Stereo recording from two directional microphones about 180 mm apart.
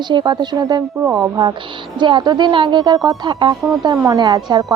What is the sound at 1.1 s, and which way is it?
Speech, 10° right (ahead or behind).